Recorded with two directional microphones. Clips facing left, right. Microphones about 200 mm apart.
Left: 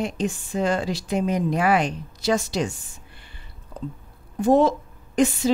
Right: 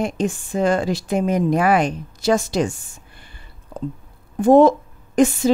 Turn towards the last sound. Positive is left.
turn(degrees=-50)  # may be behind; listen again after turning